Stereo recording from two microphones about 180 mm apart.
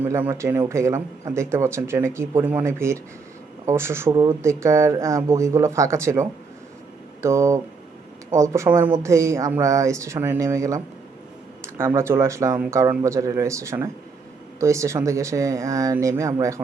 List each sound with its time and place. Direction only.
0.0 s speech: 10° right (ahead or behind)